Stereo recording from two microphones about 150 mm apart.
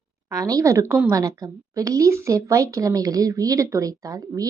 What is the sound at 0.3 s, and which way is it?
A woman's voice, 25° right (ahead or behind).